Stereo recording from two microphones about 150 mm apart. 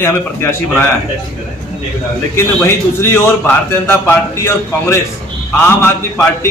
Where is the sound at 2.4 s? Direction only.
15° left (ahead or behind).